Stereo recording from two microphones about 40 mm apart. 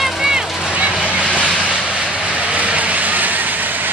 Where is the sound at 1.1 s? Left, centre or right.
Right.